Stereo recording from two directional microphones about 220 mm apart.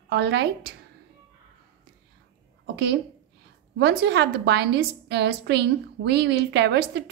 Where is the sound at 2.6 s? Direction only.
50° right (ahead or behind).